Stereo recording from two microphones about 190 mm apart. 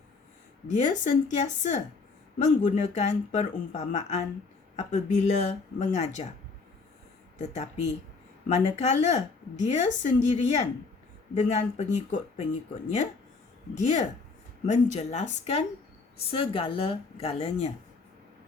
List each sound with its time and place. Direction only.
0.7 s a woman's voice: 40° left (ahead or behind)
7.3 s a woman's voice: 40° left (ahead or behind)
13.7 s a woman's voice: 40° left (ahead or behind)